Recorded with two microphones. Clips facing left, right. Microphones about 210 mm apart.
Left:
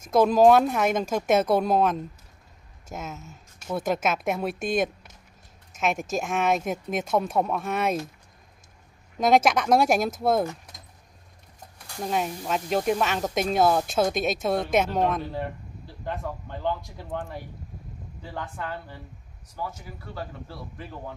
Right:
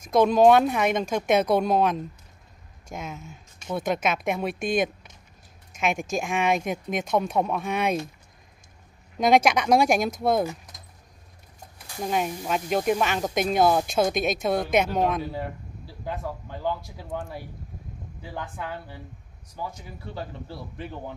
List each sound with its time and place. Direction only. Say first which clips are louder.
0.0 s speech: even; 5° left (ahead or behind)
9.2 s speech: right 1 dB; centre (ahead or behind)
11.9 s speech: right 1 dB; centre (ahead or behind)
20.2 s a man's voice: right 1 dB; 25° right (ahead or behind)